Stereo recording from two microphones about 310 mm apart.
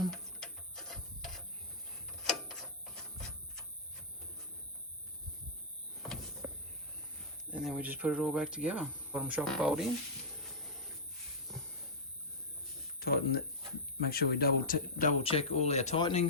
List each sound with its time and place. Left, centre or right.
0.0 s music: centre
2.2 s mechanisms: centre
6.0 s power windows: centre
7.5 s speech: centre
13.0 s speech: left